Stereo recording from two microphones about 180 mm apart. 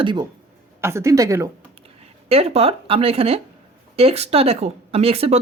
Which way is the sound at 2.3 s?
35° right (ahead or behind).